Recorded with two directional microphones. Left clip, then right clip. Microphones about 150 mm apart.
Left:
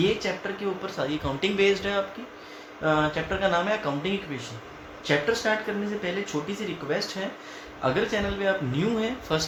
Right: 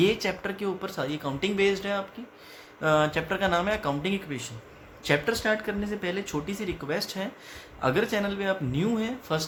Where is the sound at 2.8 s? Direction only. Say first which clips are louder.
Right 1 dB; 50° right (ahead or behind).